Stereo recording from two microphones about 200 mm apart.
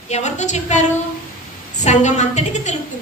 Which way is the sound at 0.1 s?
35° left (ahead or behind).